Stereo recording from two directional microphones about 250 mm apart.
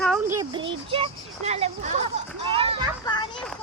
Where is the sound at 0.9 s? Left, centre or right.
Right.